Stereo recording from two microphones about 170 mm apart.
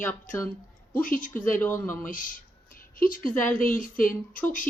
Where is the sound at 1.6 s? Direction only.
10° left (ahead or behind).